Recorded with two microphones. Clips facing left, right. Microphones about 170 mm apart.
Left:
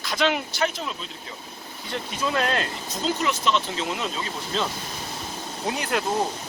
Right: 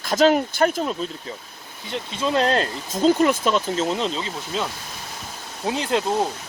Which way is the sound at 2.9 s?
50° right (ahead or behind).